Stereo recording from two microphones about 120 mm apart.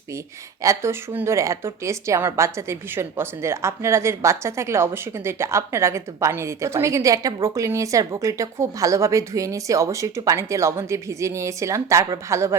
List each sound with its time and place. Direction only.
0.6 s a woman's voice: 25° right (ahead or behind)